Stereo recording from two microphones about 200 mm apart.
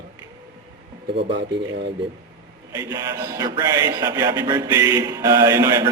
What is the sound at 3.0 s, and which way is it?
Speech, 15° right (ahead or behind).